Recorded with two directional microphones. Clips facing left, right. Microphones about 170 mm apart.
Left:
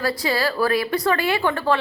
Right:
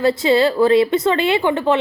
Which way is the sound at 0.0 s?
25° right (ahead or behind).